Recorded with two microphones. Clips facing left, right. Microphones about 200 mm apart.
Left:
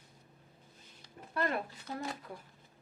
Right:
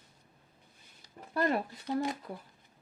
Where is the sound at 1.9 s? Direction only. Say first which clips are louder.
Right 10 dB; 45° right (ahead or behind).